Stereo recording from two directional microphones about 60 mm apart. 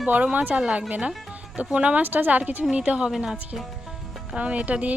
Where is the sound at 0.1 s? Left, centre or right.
Right.